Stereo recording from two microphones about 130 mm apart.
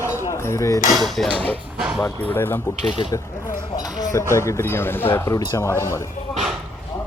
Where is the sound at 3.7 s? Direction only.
30° left (ahead or behind).